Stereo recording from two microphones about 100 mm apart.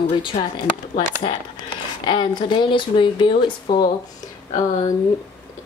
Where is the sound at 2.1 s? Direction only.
50° left (ahead or behind).